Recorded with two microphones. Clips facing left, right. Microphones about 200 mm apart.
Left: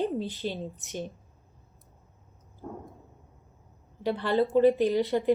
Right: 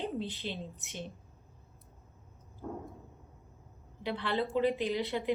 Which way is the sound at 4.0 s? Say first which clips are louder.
Left 7 dB; 45° left (ahead or behind).